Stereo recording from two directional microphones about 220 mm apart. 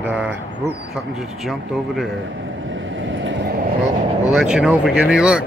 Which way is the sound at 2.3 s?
60° right (ahead or behind).